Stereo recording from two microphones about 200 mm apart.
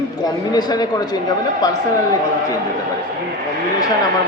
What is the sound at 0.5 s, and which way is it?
Speech, 20° left (ahead or behind).